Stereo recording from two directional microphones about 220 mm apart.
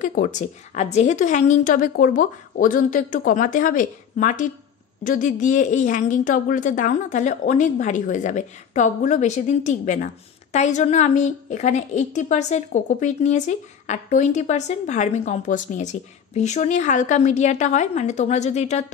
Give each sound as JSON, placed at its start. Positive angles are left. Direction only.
{"t": 0.0, "sound": "a woman's voice", "side_deg": 35}